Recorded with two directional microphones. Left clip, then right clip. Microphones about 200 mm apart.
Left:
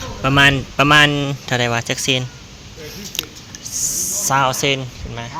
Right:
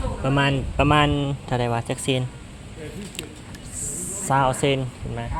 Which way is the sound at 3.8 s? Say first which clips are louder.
Left 11 dB; 30° right (ahead or behind).